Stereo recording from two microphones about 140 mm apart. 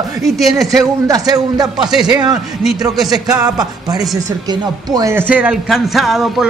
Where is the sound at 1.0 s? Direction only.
25° right (ahead or behind).